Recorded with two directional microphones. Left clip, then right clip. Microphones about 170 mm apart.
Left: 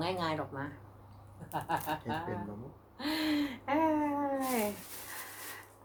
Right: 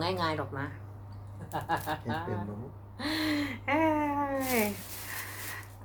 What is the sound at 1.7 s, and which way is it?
Speech, 15° right (ahead or behind).